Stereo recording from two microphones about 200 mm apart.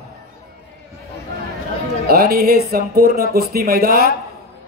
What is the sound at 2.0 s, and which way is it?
A man's voice, 50° right (ahead or behind).